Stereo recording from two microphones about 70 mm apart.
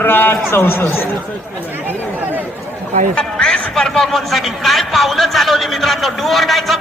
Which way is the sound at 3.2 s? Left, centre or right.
Centre.